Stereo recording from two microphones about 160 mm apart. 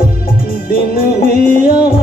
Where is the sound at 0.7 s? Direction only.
65° left (ahead or behind).